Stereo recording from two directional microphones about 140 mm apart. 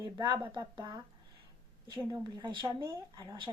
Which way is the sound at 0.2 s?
30° right (ahead or behind).